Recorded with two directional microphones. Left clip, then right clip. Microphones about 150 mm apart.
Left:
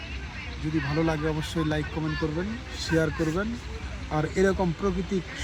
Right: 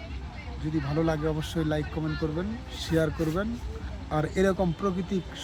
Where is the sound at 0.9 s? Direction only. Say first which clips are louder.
Right 1 dB; 30° right (ahead or behind).